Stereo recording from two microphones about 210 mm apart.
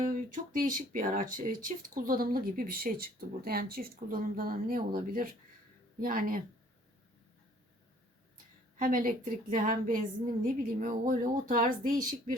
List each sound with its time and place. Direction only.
0.0 s speech: 40° right (ahead or behind)
8.8 s speech: 40° right (ahead or behind)